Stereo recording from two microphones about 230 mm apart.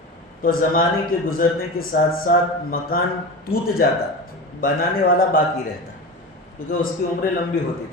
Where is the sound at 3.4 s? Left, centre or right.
Left.